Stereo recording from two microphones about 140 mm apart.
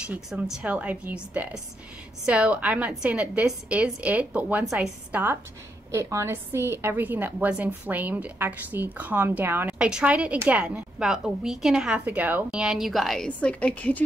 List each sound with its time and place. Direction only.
0.0 s a woman's voice: 10° right (ahead or behind); by 14.0 s 10° left (ahead or behind)